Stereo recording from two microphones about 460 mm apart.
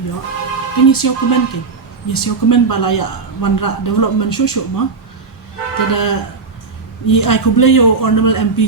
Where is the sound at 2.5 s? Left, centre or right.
Left.